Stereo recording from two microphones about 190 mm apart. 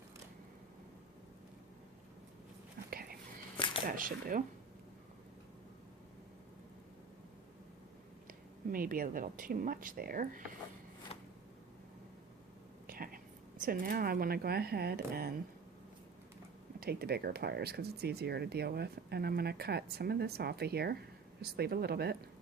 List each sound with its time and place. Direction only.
2.9 s whispering: 50° right (ahead or behind)
3.8 s speech: 45° right (ahead or behind)
8.3 s speech: 45° right (ahead or behind)
11.1 s shuffling cards: 30° left (ahead or behind)
12.9 s a sound: 50° right (ahead or behind)
13.7 s speech: 50° right (ahead or behind)
16.8 s speech: 55° right (ahead or behind)